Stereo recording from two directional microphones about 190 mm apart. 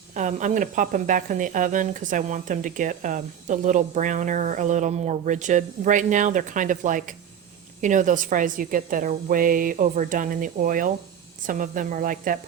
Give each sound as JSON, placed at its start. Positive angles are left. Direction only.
{"t": 0.1, "sound": "a woman's voice", "side_deg": -40}